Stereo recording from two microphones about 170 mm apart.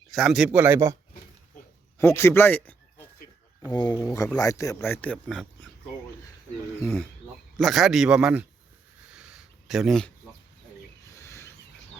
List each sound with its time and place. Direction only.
0.1 s speech: centre (ahead or behind)
2.0 s speech: 15° left (ahead or behind)
3.7 s speech: 20° left (ahead or behind); by 5.6 s 5° left (ahead or behind)
7.5 s speech: centre (ahead or behind)
9.0 s a sound: 5° right (ahead or behind)
11.2 s a sound: 15° left (ahead or behind)